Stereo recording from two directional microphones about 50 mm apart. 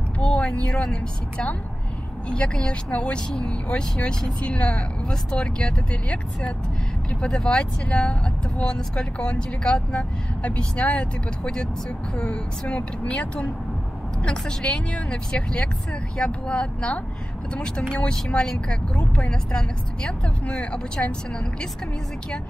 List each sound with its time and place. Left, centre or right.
0.2 s vehicle: left
2.2 s speech: left
18.9 s speech: left
19.5 s speech: centre